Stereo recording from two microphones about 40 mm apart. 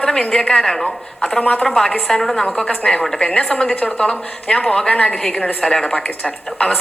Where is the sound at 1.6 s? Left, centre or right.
Centre.